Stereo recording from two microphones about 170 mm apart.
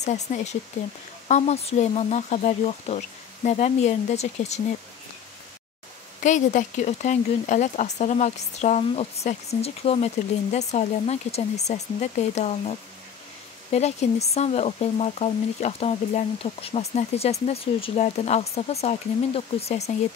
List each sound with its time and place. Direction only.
0.0 s speech: 45° left (ahead or behind)
6.2 s speech: 45° left (ahead or behind)